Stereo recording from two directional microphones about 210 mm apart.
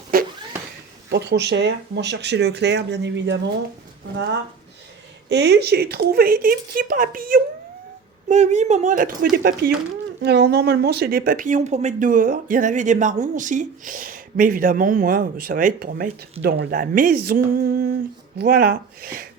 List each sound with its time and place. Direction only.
0.1 s a sound: 45° right (ahead or behind)
1.1 s speech: 55° right (ahead or behind)
5.3 s speech: 55° right (ahead or behind); by 9.0 s 35° right (ahead or behind)
9.3 s speech: 45° right (ahead or behind)